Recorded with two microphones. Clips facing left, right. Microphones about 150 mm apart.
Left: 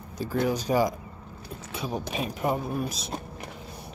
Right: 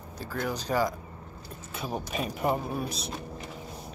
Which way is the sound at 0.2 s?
20° left (ahead or behind).